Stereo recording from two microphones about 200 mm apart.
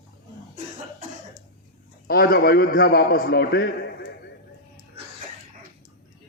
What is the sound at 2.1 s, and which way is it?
A man's voice, 45° left (ahead or behind).